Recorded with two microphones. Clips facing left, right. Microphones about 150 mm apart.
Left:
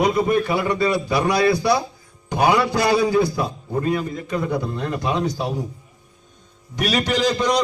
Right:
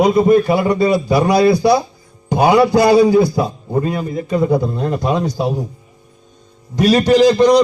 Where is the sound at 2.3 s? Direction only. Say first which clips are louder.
Right 7 dB; 30° right (ahead or behind).